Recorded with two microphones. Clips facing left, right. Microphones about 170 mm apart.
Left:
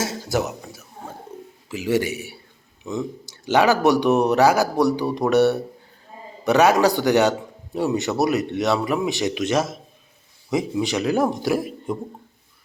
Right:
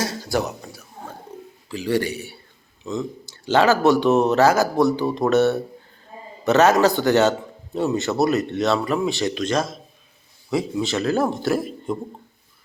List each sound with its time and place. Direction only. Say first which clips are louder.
0.4 s a sound: even; 20° left (ahead or behind)
1.8 s a man's voice: left 1 dB; 5° left (ahead or behind)
2.0 s a man's voice: even; 15° left (ahead or behind)